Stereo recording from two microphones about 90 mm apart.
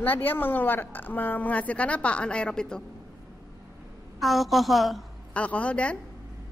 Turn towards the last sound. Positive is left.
turn(degrees=15)  # may be behind; listen again after turning